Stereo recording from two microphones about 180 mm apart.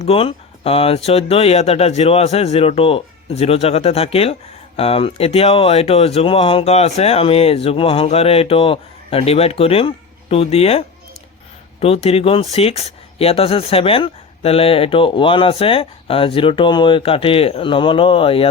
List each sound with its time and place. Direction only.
0.0 s speech: 30° left (ahead or behind)
12.0 s speech: 35° left (ahead or behind)